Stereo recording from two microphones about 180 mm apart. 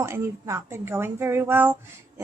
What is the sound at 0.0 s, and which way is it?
A woman's voice, 15° right (ahead or behind).